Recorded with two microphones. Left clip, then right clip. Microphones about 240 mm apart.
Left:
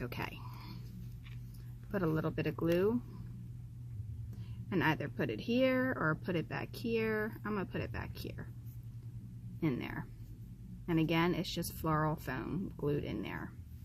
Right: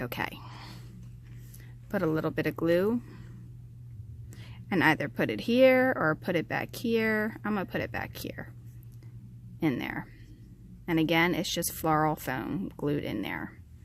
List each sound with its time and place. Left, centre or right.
0.0 s a sound: right
1.9 s speech: right
4.7 s speech: right
9.6 s speech: right